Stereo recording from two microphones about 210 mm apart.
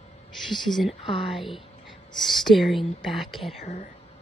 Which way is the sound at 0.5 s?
Centre (ahead or behind).